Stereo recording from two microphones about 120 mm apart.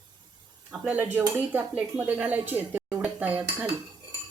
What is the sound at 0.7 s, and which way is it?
Speech, 15° right (ahead or behind).